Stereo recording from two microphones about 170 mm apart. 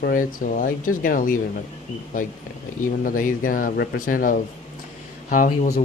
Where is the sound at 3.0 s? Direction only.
55° left (ahead or behind).